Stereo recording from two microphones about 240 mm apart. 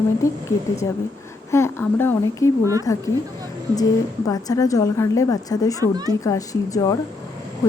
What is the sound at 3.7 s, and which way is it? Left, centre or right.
A woman's voice, centre.